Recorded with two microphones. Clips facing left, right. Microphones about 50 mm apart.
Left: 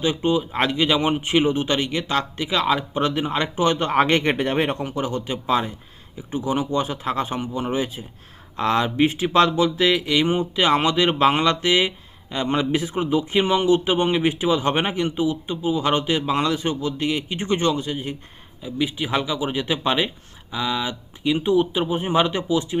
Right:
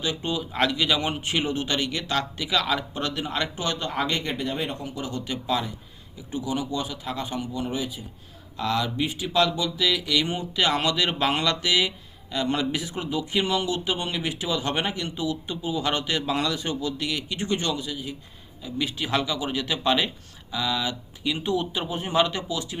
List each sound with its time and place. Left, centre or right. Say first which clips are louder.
0.0 s speech: left 7 dB; left
3.8 s speech: left 8 dB; left
18.6 s speech: left 4 dB; centre